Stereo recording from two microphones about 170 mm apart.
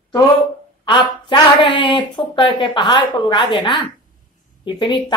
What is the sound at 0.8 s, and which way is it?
Speech, 25° left (ahead or behind).